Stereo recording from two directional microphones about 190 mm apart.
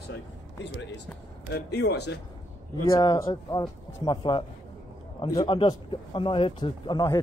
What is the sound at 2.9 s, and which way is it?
A man's voice, 15° left (ahead or behind).